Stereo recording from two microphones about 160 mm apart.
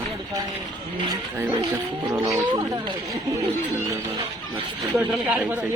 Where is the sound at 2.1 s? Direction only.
20° right (ahead or behind).